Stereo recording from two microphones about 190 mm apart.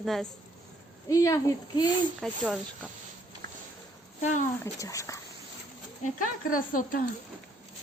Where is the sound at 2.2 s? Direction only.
Centre (ahead or behind).